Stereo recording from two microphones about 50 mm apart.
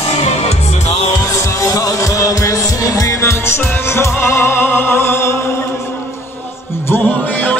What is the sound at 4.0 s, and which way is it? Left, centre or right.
Music, left.